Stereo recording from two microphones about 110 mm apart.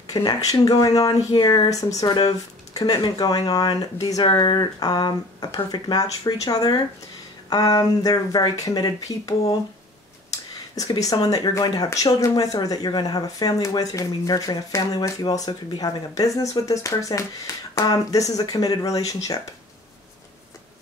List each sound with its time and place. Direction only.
0.1 s speech: 35° left (ahead or behind)